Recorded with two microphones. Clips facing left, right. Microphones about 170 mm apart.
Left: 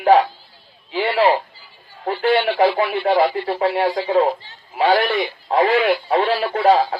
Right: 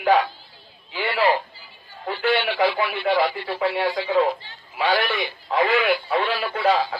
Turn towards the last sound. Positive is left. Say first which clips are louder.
# left 6 dB
turn(degrees=40)  # may be behind; listen again after turning